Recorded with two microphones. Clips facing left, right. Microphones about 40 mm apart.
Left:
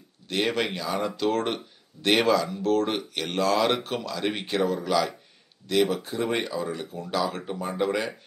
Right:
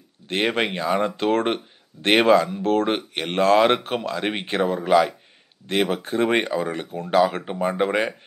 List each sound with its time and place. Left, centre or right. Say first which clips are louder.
0.3 s speech: right 3 dB; right